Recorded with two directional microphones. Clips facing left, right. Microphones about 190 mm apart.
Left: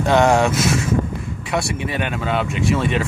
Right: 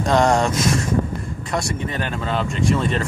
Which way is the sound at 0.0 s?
5° left (ahead or behind).